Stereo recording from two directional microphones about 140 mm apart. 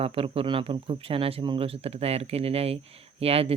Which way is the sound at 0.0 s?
45° right (ahead or behind).